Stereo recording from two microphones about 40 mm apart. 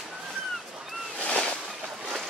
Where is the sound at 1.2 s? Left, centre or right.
Left.